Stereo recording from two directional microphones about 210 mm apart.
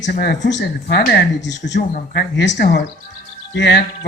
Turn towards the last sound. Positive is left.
turn(degrees=55)  # may be behind; listen again after turning